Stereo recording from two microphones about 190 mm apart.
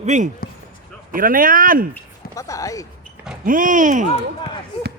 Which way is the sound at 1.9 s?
15° left (ahead or behind).